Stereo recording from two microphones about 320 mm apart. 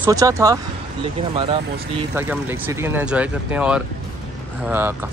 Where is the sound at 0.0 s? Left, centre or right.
Centre.